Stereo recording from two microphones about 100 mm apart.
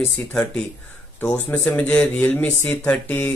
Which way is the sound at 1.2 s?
20° left (ahead or behind).